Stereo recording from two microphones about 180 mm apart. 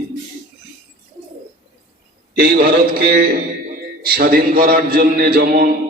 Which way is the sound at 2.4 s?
60° right (ahead or behind).